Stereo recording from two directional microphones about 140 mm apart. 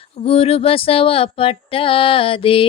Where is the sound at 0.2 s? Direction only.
45° left (ahead or behind).